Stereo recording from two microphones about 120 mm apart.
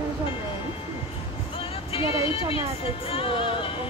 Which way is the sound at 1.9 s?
50° left (ahead or behind).